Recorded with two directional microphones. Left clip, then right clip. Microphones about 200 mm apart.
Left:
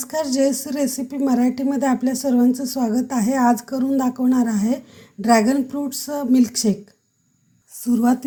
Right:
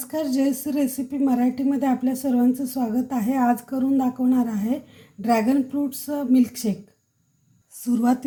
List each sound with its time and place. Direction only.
0.0 s a woman's voice: 30° left (ahead or behind)
7.8 s a woman's voice: 25° left (ahead or behind)